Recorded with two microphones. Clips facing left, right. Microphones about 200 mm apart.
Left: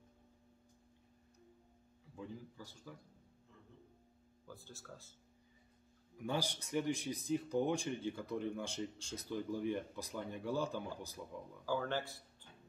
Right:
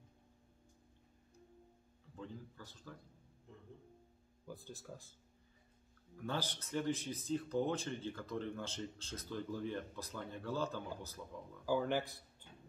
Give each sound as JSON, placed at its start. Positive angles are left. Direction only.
{"t": 2.1, "sound": "speech", "side_deg": 10}
{"t": 4.5, "sound": "speech", "side_deg": -15}
{"t": 6.1, "sound": "speech", "side_deg": 15}
{"t": 11.6, "sound": "speech", "side_deg": -15}